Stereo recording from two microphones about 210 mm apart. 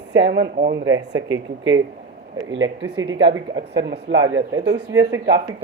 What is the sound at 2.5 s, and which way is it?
Speech, 65° right (ahead or behind).